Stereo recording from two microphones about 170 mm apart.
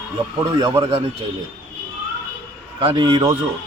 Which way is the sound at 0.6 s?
25° right (ahead or behind).